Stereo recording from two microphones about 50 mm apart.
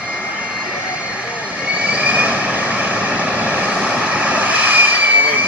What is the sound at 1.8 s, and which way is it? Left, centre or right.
Vehicle, right.